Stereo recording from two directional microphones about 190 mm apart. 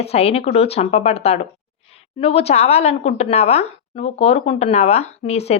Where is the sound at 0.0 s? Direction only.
35° left (ahead or behind).